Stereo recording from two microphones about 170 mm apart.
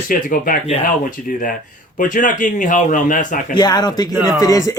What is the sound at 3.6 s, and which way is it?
Speech, 25° left (ahead or behind).